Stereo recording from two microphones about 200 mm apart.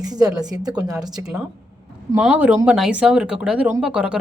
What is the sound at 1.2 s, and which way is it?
A woman's voice, 5° right (ahead or behind).